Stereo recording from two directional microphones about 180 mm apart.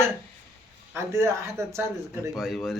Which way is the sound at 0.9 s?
15° right (ahead or behind).